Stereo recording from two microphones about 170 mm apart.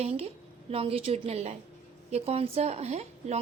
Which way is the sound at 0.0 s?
35° right (ahead or behind).